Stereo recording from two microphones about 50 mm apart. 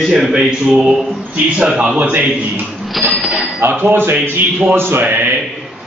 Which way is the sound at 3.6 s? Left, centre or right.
Right.